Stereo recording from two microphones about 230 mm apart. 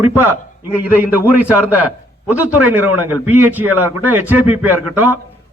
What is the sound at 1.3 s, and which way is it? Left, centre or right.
Speech, centre.